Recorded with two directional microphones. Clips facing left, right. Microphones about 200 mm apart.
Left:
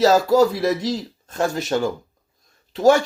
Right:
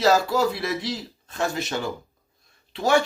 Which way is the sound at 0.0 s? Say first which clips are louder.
Left 5 dB; 40° left (ahead or behind).